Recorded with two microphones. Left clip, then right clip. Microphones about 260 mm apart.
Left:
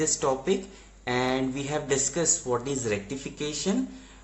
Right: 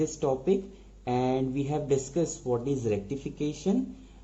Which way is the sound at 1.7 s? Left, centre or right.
Centre.